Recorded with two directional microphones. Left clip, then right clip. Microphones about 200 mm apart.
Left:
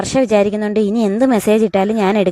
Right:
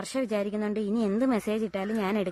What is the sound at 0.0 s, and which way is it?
A woman's voice, 40° left (ahead or behind).